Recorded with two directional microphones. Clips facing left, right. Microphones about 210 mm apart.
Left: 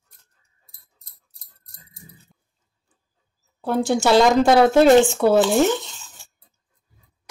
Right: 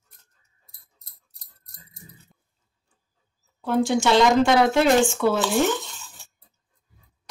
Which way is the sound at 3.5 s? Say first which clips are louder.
Left 1 dB; 40° left (ahead or behind).